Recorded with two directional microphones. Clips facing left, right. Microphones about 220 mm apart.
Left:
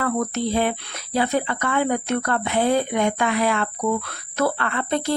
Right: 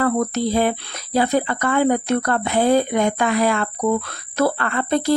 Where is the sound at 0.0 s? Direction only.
40° right (ahead or behind).